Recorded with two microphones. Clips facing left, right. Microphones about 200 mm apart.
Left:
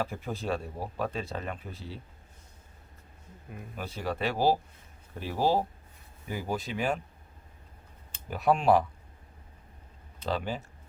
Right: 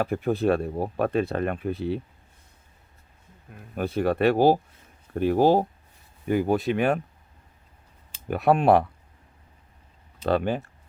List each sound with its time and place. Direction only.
0.0 s speech: 60° right (ahead or behind)
3.8 s speech: 55° right (ahead or behind)
8.3 s speech: 60° right (ahead or behind)
10.2 s speech: 60° right (ahead or behind)